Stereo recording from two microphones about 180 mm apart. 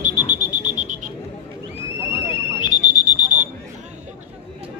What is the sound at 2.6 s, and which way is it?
Smoke detector, 45° right (ahead or behind).